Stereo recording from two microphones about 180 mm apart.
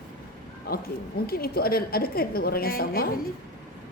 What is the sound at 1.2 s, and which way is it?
A woman's voice, 55° left (ahead or behind).